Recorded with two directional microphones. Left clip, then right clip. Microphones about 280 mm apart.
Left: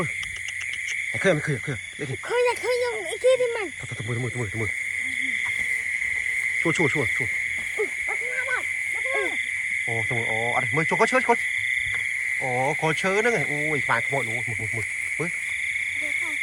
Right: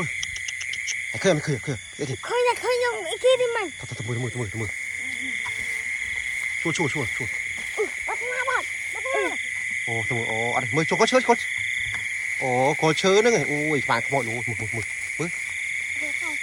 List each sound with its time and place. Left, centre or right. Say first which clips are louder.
1.2 s speech: right 1 dB; centre
2.3 s a sound: right 1 dB; centre
2.8 s speech: right 1 dB; centre
6.6 s speech: left 3 dB; centre
9.0 s owl: right 3 dB; right
9.9 s speech: right 1 dB; centre
12.4 s speech: right 6 dB; right